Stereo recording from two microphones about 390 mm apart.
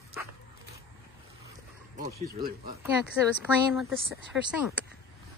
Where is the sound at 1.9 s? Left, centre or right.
Right.